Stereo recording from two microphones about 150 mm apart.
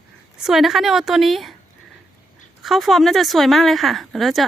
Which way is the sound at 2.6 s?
Centre (ahead or behind).